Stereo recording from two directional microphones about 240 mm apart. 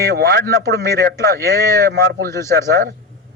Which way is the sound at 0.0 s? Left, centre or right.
Right.